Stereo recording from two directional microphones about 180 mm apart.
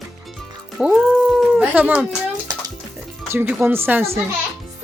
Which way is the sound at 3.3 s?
10° right (ahead or behind).